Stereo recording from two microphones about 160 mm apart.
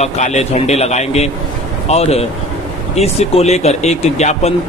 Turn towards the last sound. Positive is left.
turn(degrees=45)  # may be behind; listen again after turning